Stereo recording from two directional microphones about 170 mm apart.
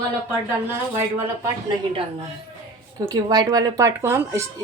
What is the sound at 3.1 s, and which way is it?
A woman's voice, 20° right (ahead or behind).